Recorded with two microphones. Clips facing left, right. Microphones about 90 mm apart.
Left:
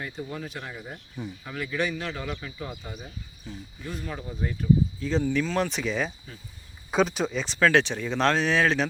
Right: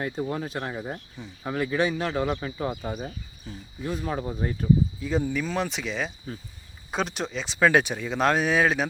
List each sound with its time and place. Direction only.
0.0 s speech: 55° right (ahead or behind)
0.3 s speech: 40° right (ahead or behind)
2.8 s speech: 55° right (ahead or behind)
4.4 s speech: 40° right (ahead or behind)
4.9 s speech: 10° right (ahead or behind)
7.6 s speech: 10° right (ahead or behind)